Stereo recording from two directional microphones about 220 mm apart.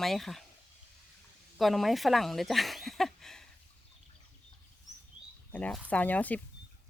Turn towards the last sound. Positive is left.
turn(degrees=5)  # may be behind; listen again after turning